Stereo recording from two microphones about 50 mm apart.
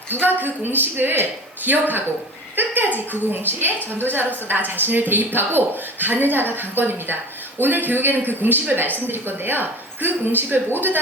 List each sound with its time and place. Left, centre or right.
0.1 s speech: right
2.6 s a sound: right
3.1 s a man's voice: right